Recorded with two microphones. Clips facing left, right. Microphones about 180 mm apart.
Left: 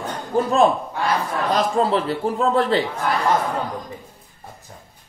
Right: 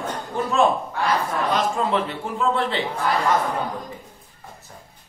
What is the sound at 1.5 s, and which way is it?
A woman's voice, 35° left (ahead or behind).